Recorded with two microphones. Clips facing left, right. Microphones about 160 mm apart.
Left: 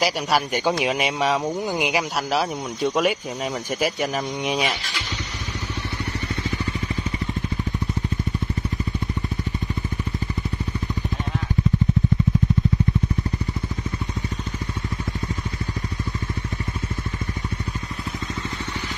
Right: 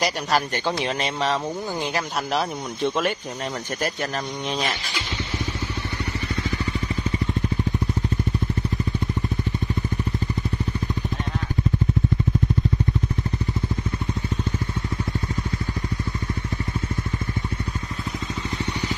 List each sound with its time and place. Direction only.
0.0 s speech: 10° left (ahead or behind)